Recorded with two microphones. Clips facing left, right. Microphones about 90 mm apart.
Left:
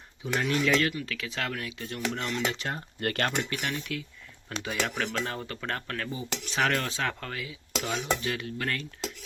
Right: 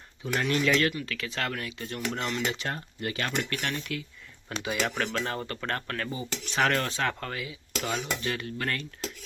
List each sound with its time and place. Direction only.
0.3 s speech: 5° left (ahead or behind)
3.0 s speech: 60° left (ahead or behind)
3.3 s speech: 5° left (ahead or behind)